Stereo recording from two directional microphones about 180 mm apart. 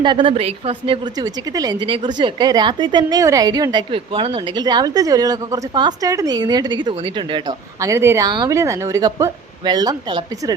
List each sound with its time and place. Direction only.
0.0 s a woman's voice: 25° right (ahead or behind)